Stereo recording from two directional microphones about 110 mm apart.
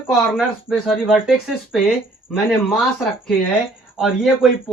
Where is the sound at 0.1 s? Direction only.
Centre (ahead or behind).